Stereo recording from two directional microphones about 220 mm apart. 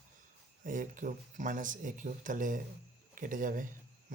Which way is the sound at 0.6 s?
35° right (ahead or behind).